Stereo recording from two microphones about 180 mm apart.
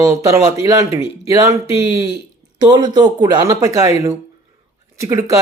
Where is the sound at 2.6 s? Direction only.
25° right (ahead or behind).